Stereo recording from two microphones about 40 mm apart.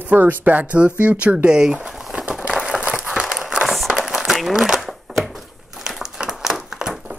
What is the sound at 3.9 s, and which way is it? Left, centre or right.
Crumpling, centre.